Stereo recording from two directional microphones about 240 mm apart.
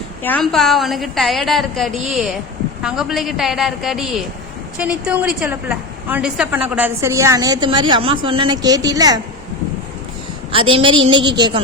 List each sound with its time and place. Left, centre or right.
0.2 s a woman's voice: centre
10.5 s a woman's voice: right